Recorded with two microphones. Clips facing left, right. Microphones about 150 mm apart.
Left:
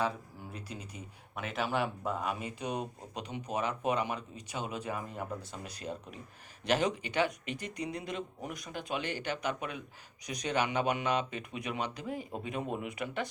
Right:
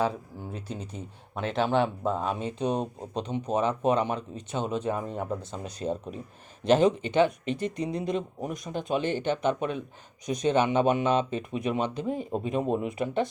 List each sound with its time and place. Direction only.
0.5 s speech: 30° right (ahead or behind)